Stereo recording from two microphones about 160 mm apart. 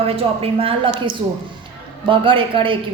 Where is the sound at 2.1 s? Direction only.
30° right (ahead or behind).